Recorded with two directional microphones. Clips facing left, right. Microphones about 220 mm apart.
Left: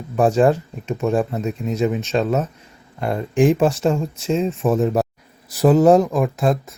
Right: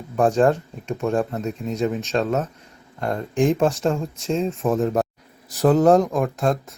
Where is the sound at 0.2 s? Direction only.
5° left (ahead or behind).